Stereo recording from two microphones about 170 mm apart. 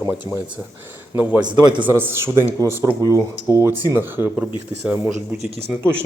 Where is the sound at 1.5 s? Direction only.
25° right (ahead or behind).